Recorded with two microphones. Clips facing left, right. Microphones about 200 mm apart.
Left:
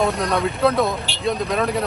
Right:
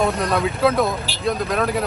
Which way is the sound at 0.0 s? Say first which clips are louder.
Even; centre (ahead or behind).